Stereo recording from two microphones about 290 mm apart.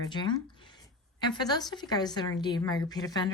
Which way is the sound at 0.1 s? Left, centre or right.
Centre.